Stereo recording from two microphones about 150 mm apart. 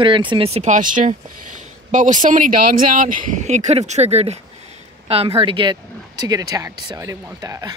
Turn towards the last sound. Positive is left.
turn(degrees=-20)  # may be behind; listen again after turning